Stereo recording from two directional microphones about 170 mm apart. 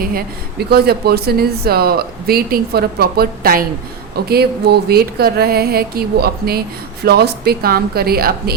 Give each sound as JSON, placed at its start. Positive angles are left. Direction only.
{"t": 0.7, "sound": "speech", "side_deg": -65}